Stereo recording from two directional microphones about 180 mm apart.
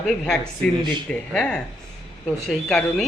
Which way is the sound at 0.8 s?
25° right (ahead or behind).